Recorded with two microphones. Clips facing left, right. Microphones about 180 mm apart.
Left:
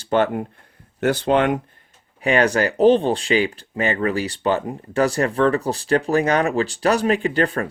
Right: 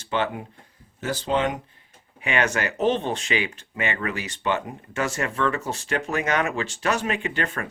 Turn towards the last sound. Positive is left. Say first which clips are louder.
# left 8 dB
turn(degrees=35)  # may be behind; listen again after turning